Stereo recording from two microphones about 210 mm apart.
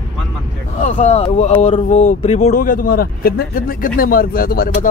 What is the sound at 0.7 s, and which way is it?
Speech, 35° left (ahead or behind).